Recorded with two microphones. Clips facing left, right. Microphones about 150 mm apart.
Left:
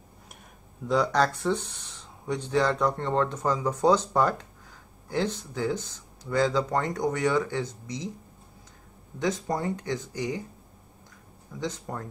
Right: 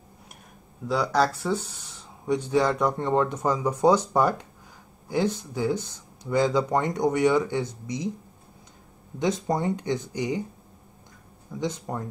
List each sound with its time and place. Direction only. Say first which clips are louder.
0.8 s speech: even; 5° right (ahead or behind)
9.2 s speech: right 3 dB; 20° right (ahead or behind)
11.6 s speech: right 3 dB; 15° right (ahead or behind)